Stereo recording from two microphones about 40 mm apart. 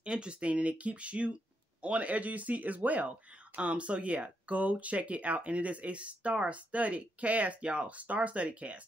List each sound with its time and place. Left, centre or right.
0.0 s speech: right
7.6 s speech: right